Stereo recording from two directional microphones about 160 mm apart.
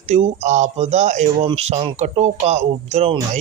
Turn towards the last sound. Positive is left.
turn(degrees=-45)  # may be behind; listen again after turning